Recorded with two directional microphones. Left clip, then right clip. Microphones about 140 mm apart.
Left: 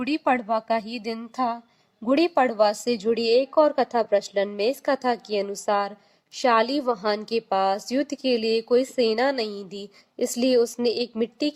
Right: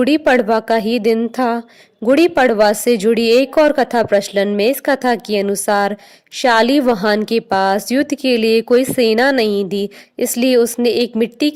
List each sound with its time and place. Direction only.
0.1 s a woman's voice: 55° right (ahead or behind)